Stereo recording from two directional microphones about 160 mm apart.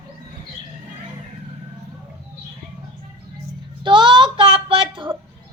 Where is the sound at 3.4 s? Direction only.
30° right (ahead or behind).